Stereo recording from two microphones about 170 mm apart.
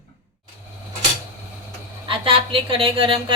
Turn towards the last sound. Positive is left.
turn(degrees=-30)  # may be behind; listen again after turning